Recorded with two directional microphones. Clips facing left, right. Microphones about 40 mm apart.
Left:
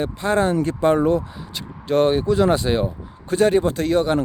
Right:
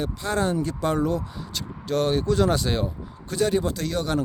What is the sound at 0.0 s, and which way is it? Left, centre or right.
Speech, left.